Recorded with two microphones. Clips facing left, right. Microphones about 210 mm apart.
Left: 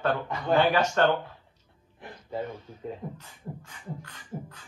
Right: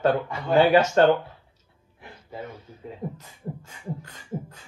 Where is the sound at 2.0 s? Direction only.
10° right (ahead or behind).